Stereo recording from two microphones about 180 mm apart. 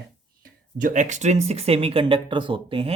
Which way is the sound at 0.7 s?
45° right (ahead or behind).